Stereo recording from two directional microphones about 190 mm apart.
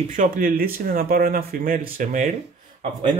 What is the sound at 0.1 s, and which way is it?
Speech, 45° right (ahead or behind).